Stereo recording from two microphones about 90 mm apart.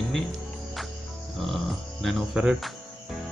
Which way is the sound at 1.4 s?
5° left (ahead or behind).